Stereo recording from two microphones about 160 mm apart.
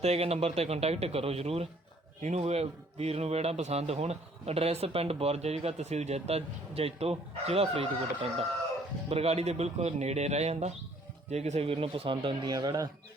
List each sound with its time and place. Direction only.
0.0 s a man's voice: 40° right (ahead or behind); by 12.9 s 25° right (ahead or behind)